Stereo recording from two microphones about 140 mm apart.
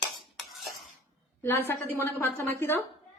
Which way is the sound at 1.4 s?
15° left (ahead or behind).